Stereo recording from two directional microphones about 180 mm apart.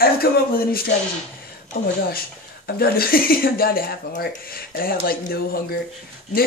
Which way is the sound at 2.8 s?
55° left (ahead or behind).